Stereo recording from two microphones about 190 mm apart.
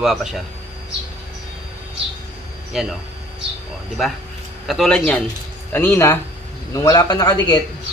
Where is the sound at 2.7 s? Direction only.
Centre (ahead or behind).